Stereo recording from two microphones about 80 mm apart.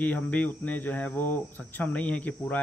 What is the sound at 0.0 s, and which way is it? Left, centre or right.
Speech, centre.